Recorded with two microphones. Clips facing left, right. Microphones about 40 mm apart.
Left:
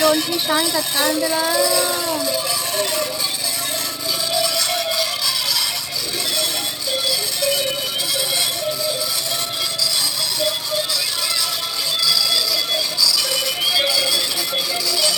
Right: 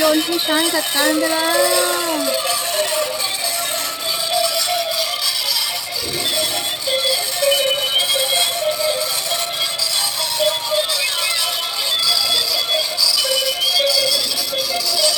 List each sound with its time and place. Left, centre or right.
0.0 s speech: centre; by 2.6 s right
4.4 s music: centre
7.4 s music: right
12.0 s alarm clock: centre
13.7 s music: centre